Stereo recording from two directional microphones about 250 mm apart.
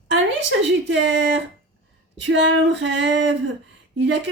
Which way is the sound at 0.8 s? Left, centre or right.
Right.